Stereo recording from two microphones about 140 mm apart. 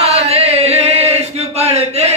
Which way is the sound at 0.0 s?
45° right (ahead or behind).